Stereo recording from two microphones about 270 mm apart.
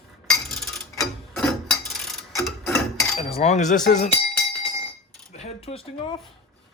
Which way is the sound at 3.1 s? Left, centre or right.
Left.